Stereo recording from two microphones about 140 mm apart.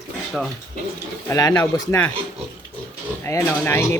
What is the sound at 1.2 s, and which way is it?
Speech, 25° left (ahead or behind).